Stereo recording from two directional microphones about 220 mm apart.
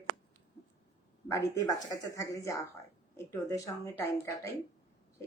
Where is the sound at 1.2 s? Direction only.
15° left (ahead or behind).